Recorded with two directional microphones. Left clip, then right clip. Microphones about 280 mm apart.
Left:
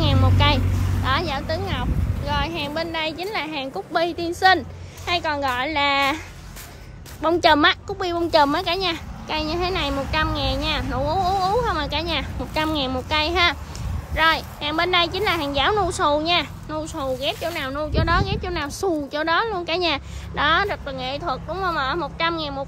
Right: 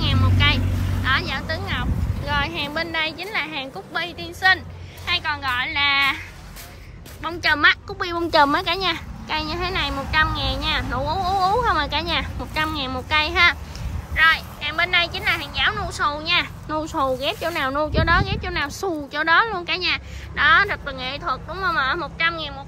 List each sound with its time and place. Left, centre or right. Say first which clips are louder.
0.0 s vehicle: even; centre
1.0 s a woman's voice: right 1 dB; centre
22.3 s speech: left 2 dB; centre